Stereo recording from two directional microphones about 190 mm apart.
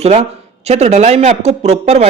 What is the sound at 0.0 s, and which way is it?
Speech, 35° right (ahead or behind).